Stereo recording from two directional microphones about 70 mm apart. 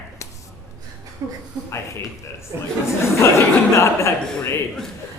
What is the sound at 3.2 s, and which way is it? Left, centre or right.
Speech, left.